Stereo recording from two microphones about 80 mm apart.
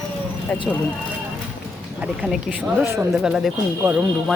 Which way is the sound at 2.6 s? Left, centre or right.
Right.